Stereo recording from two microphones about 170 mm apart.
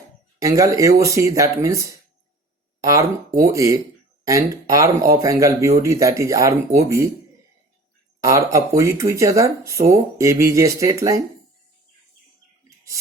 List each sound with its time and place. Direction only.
0.4 s speech: 20° right (ahead or behind)
8.2 s speech: 20° right (ahead or behind)